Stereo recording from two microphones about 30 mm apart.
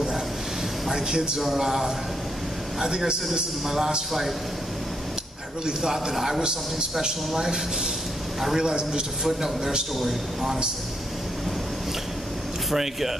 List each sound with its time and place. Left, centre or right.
0.9 s a man's voice: right
1.4 s a man's voice: centre
3.6 s a man's voice: centre
5.8 s a man's voice: centre
6.4 s a man's voice: right
9.9 s a man's voice: centre
12.7 s a man's voice: centre